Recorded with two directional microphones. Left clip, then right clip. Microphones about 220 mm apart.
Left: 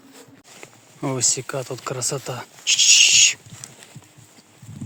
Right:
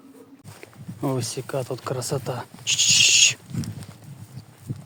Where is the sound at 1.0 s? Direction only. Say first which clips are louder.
Left 4 dB; 10° right (ahead or behind).